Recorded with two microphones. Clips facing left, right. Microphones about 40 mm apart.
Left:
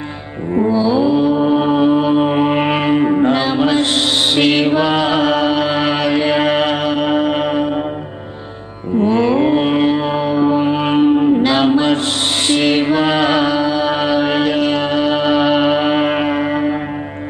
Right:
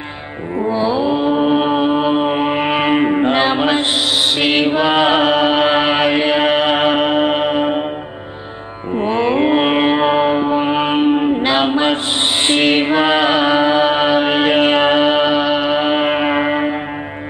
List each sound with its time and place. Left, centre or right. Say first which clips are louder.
0.7 s mantra: left 1 dB; right
2.5 s mantra: left 1 dB; centre
2.9 s music: left 2 dB; right
4.4 s mantra: left 3 dB; centre
6.8 s music: right 2 dB; right
7.3 s mantra: right 1 dB; right
8.9 s music: left 2 dB; right
13.5 s music: right 3 dB; right
15.4 s music: left 2 dB; centre; by 16.7 s right